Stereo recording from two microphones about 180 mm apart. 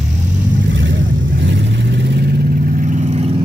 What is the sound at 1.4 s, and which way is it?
Vehicle, 85° right.